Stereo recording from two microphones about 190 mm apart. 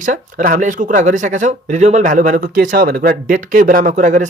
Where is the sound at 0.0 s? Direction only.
45° right (ahead or behind).